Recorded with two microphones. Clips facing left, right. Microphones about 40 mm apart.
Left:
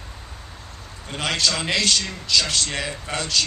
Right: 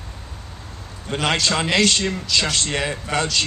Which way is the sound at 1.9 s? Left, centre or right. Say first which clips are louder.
Right 1 dB; right.